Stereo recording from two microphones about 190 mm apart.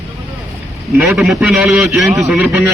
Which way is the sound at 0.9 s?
5° right (ahead or behind).